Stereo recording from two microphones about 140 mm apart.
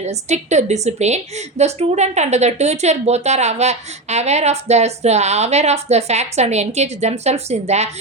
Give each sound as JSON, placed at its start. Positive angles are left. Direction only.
{"t": 0.0, "sound": "a woman's voice", "side_deg": -55}